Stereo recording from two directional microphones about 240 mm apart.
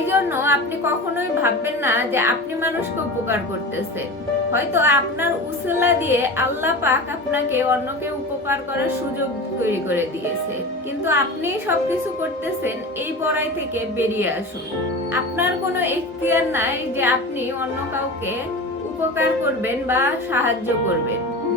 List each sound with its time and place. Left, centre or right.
0.0 s music: centre
1.1 s a woman's voice: centre
4.5 s a woman's voice: centre
11.0 s a woman's voice: centre
13.3 s a woman's voice: centre
19.6 s a woman's voice: centre